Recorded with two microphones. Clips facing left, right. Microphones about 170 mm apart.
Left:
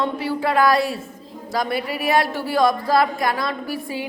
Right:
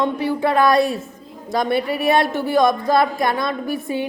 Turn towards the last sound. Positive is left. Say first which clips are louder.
# right 4 dB
turn(degrees=-25)  # may be behind; listen again after turning